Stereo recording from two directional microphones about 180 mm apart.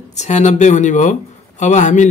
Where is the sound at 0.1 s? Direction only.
40° left (ahead or behind).